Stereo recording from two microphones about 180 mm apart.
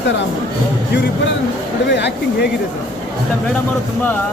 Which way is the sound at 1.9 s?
70° left (ahead or behind).